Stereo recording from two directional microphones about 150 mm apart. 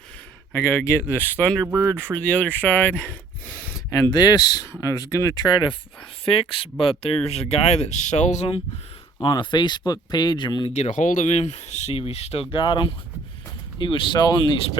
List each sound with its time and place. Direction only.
0.7 s speech: 15° left (ahead or behind)
1.6 s speech: 20° right (ahead or behind)
2.1 s speech: 10° left (ahead or behind)
4.1 s speech: 30° left (ahead or behind); by 8.6 s 45° left (ahead or behind)
9.2 s speech: 30° left (ahead or behind)
10.8 s speech: 55° left (ahead or behind); by 14.7 s 30° left (ahead or behind)